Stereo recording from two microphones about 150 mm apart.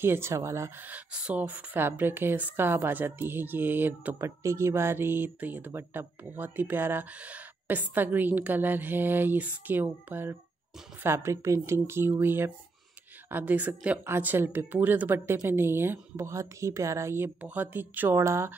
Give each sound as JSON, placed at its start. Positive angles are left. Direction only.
{"t": 0.0, "sound": "speech", "side_deg": -15}